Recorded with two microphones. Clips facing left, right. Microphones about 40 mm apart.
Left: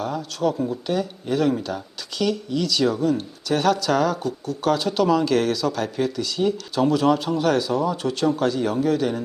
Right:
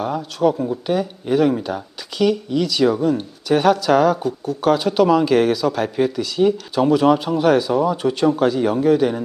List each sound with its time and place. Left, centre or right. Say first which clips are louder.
0.0 s speech: right 5 dB; centre